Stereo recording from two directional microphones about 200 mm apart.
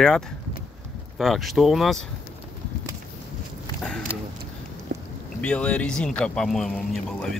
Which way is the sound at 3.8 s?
5° left (ahead or behind).